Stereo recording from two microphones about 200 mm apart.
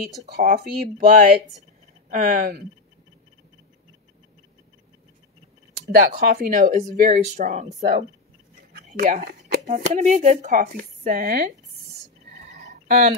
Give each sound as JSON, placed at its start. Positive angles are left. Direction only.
{"t": 0.3, "sound": "speech", "side_deg": -45}
{"t": 5.9, "sound": "speech", "side_deg": -50}
{"t": 12.8, "sound": "speech", "side_deg": -50}